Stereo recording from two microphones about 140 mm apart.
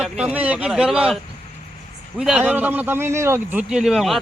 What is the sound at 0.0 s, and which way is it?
Speech, 10° right (ahead or behind).